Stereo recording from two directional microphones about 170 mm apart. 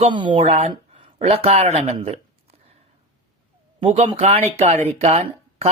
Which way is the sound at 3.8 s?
35° right (ahead or behind).